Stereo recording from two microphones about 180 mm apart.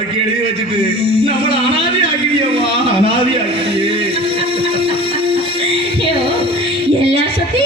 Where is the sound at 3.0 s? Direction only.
30° right (ahead or behind).